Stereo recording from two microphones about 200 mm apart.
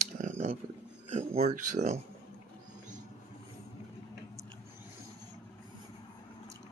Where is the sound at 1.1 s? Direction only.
30° right (ahead or behind).